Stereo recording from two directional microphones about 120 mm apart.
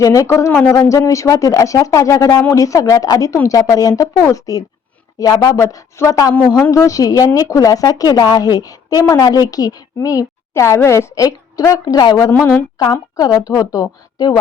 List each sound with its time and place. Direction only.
0.0 s a woman's voice: 30° left (ahead or behind)